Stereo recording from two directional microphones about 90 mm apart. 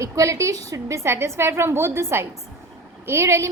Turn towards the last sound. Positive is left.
turn(degrees=-30)  # may be behind; listen again after turning